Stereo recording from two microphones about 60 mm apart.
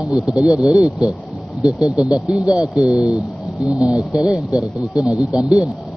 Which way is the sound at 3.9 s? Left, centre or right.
Centre.